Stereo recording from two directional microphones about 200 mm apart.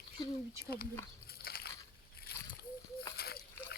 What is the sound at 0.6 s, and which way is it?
Speech, 50° left (ahead or behind).